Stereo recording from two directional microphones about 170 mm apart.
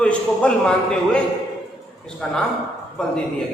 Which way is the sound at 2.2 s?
5° left (ahead or behind).